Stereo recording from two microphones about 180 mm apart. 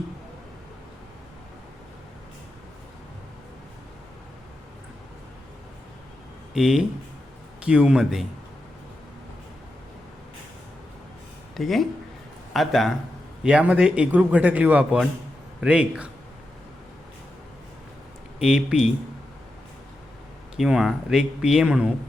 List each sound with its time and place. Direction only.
6.5 s speech: 5° right (ahead or behind)
11.5 s a man's voice: centre (ahead or behind)
18.3 s speech: 5° right (ahead or behind)
20.6 s speech: centre (ahead or behind)